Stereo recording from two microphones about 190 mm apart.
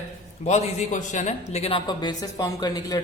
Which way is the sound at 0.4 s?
35° left (ahead or behind).